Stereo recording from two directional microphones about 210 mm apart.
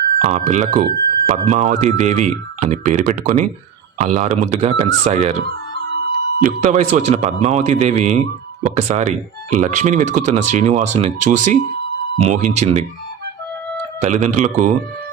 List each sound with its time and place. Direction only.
0.2 s speech: 35° right (ahead or behind)
6.4 s speech: 35° right (ahead or behind)
14.0 s speech: 35° right (ahead or behind)